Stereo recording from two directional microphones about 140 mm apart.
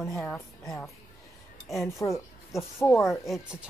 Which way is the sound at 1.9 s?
20° left (ahead or behind).